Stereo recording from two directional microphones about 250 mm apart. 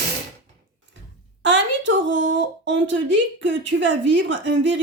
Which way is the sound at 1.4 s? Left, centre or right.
Right.